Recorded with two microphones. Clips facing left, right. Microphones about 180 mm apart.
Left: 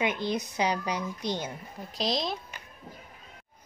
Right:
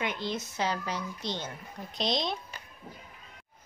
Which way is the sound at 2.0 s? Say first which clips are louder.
Left 1 dB; centre (ahead or behind).